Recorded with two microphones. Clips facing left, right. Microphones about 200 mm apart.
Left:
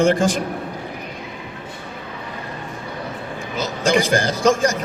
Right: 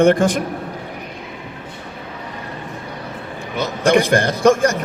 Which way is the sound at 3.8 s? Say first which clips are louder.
Right 3 dB; 60° right (ahead or behind).